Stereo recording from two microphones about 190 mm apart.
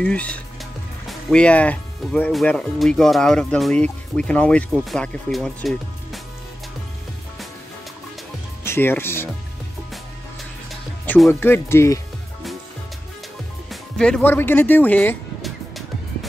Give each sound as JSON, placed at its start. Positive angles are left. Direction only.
{"t": 0.0, "sound": "speech", "side_deg": 5}
{"t": 8.6, "sound": "speech", "side_deg": 10}
{"t": 11.1, "sound": "speech", "side_deg": 5}
{"t": 13.7, "sound": "music", "side_deg": 5}